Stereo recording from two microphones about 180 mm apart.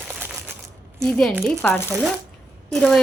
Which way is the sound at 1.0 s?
5° left (ahead or behind).